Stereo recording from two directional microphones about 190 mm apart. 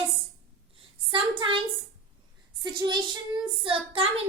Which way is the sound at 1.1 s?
25° right (ahead or behind).